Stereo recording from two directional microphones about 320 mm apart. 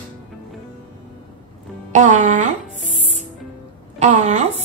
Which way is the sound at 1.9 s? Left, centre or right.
Right.